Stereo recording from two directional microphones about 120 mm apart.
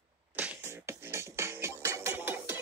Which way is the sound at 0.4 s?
15° right (ahead or behind).